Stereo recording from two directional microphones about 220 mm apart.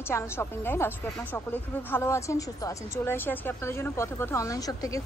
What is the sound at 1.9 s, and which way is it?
A woman's voice, 10° left (ahead or behind).